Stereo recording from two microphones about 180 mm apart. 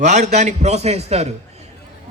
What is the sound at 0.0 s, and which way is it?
A man's voice, 40° right (ahead or behind).